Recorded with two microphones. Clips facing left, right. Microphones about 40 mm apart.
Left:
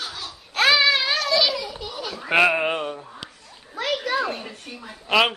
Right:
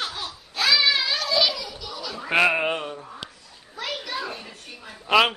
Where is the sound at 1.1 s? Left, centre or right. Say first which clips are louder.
Left 2 dB; centre.